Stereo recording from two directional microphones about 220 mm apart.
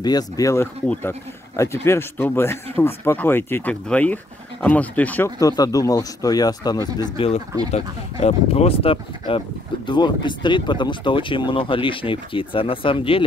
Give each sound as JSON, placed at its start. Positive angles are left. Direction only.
{"t": 0.0, "sound": "speech", "side_deg": 15}